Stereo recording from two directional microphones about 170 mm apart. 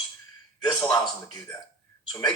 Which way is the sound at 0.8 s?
25° left (ahead or behind).